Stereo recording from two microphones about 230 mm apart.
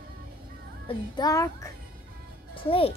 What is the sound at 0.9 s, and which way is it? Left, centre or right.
Child singing, centre.